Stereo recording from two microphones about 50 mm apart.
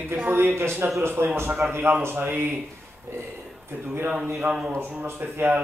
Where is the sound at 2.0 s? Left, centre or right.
Right.